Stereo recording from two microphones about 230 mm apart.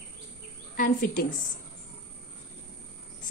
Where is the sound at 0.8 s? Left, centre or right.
Left.